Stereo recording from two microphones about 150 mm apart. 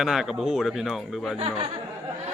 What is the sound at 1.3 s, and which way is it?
Speech, 40° right (ahead or behind).